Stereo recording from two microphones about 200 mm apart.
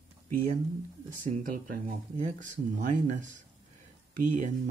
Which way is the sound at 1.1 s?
45° right (ahead or behind).